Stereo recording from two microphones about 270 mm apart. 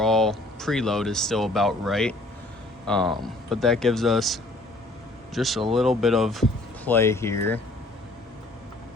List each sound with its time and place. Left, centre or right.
0.0 s speech: centre
3.0 s speech: centre
3.2 s speech: centre